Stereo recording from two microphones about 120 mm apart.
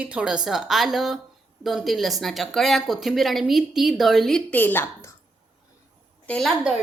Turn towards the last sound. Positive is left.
turn(degrees=5)  # may be behind; listen again after turning